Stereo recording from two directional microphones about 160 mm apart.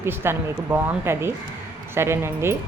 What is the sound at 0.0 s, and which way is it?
A woman's voice, 15° right (ahead or behind).